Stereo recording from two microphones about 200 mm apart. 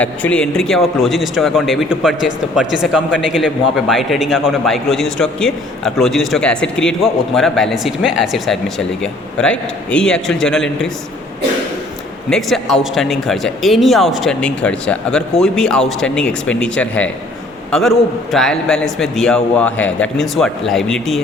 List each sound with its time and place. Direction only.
0.0 s speech: 5° left (ahead or behind)
12.3 s speech: centre (ahead or behind)